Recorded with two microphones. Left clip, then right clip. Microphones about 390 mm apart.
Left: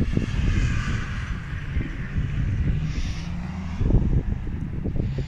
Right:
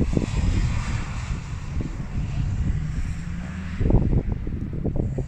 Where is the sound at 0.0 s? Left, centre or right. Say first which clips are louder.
Right 3 dB; right.